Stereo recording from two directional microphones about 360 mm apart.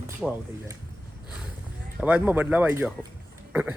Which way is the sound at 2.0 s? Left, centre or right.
Centre.